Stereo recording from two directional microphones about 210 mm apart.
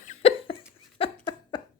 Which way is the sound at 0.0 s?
30° left (ahead or behind).